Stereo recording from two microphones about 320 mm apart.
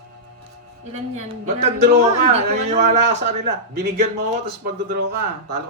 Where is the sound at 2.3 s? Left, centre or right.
Right.